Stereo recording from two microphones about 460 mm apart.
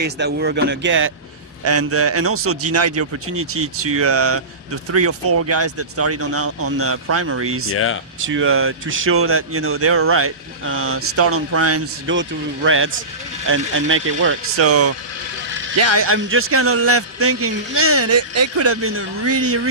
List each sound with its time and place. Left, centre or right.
0.0 s speech: right
7.7 s speech: left
8.2 s speech: right